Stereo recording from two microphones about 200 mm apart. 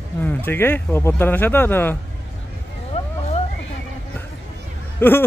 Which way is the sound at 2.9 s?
30° left (ahead or behind).